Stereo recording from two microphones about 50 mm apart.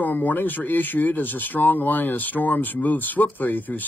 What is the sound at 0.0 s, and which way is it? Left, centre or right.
Speech, left.